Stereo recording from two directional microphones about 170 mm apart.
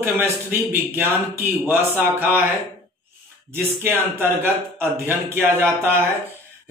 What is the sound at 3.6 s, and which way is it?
A man's voice, 15° right (ahead or behind).